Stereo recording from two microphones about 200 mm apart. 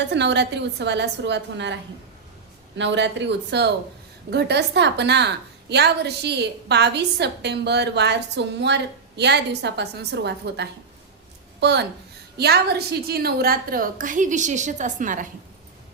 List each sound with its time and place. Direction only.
0.1 s a woman's voice: 60° right (ahead or behind); by 15.3 s 40° right (ahead or behind)